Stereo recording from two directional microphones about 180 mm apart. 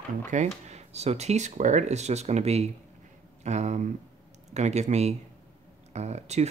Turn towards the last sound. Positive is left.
turn(degrees=-40)  # may be behind; listen again after turning